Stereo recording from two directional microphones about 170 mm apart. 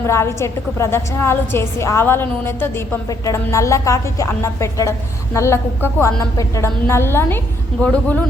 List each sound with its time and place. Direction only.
0.0 s a woman's voice: 15° left (ahead or behind)